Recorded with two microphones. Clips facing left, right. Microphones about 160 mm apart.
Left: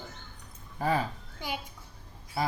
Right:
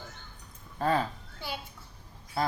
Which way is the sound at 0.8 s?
10° left (ahead or behind).